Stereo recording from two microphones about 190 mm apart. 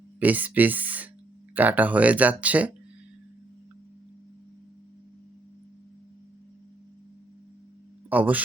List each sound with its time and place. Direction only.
0.2 s speech: 10° right (ahead or behind)
8.1 s speech: 10° right (ahead or behind)